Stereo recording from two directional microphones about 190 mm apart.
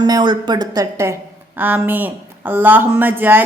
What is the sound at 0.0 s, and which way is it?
Speech, 20° right (ahead or behind).